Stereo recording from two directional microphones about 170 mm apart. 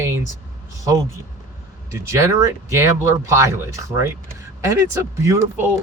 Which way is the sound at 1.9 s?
15° right (ahead or behind).